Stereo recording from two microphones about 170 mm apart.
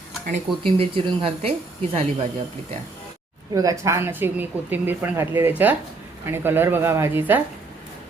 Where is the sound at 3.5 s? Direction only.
20° right (ahead or behind).